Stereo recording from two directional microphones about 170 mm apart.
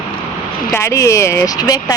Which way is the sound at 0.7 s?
15° left (ahead or behind).